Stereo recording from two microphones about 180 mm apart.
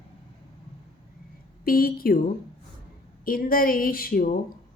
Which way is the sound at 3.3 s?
55° left (ahead or behind).